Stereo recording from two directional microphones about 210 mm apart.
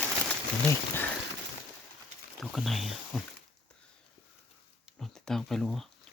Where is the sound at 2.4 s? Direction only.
Centre (ahead or behind).